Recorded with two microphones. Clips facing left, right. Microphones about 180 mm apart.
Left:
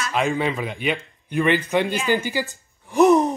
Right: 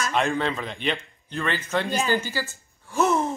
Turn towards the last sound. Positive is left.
turn(degrees=15)  # may be behind; listen again after turning